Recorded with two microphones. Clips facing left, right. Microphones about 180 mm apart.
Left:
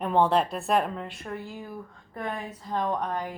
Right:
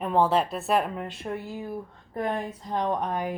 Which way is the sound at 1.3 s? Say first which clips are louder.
Right 4 dB; 20° right (ahead or behind).